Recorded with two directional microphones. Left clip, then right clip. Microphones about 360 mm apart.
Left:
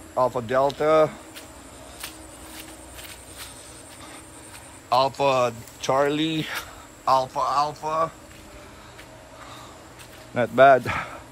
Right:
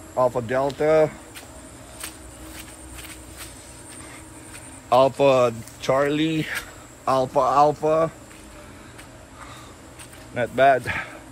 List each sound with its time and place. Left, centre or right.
0.5 s speech: centre
4.8 s a man's voice: centre
10.3 s speech: centre